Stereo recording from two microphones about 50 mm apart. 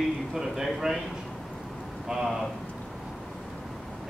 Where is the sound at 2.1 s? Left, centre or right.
Centre.